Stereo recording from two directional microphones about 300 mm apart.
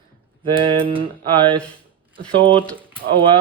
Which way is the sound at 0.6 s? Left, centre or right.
Centre.